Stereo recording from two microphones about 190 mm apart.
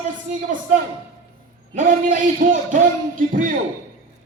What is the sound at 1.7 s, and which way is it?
A man's voice, 45° right (ahead or behind).